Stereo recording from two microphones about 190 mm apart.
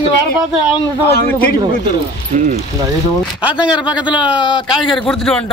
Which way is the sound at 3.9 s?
25° left (ahead or behind).